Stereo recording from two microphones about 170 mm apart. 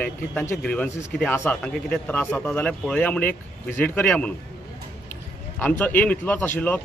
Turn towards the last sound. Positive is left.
turn(degrees=10)  # may be behind; listen again after turning